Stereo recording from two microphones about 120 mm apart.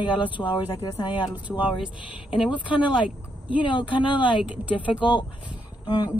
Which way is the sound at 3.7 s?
40° left (ahead or behind).